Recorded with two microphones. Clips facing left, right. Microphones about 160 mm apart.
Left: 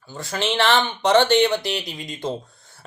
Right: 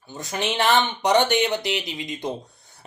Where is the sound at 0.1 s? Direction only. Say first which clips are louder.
Left 2 dB; 20° right (ahead or behind).